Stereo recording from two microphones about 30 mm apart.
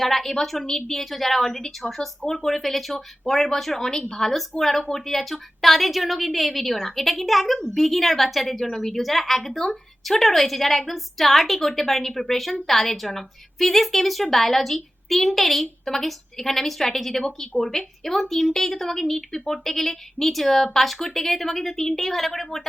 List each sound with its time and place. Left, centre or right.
0.0 s a woman's voice: centre